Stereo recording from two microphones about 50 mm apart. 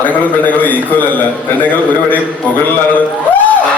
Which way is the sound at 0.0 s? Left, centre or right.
Left.